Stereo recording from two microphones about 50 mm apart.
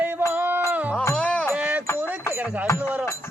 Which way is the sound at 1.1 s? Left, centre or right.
Left.